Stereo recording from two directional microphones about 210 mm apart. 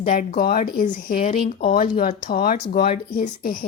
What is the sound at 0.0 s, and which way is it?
Speech, 35° left (ahead or behind).